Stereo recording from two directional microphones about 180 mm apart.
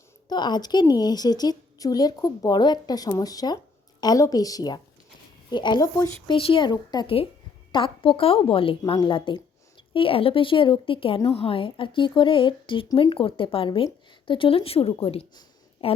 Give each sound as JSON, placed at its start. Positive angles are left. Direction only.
{"t": 0.3, "sound": "a woman's voice", "side_deg": 25}